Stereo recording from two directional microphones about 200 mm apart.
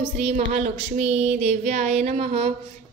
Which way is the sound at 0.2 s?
35° right (ahead or behind).